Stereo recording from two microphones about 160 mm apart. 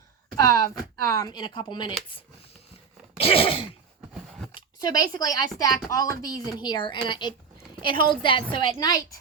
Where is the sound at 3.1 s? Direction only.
35° left (ahead or behind).